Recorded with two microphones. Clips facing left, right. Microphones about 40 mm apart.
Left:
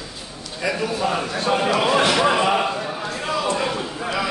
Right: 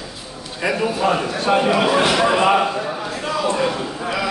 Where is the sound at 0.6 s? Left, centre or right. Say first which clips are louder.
Right 3 dB; centre.